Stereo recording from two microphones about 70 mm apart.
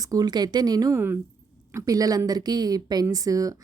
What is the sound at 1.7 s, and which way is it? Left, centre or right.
Speech, right.